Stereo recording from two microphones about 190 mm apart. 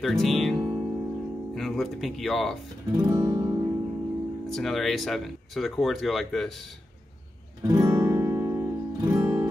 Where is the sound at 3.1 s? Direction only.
20° right (ahead or behind).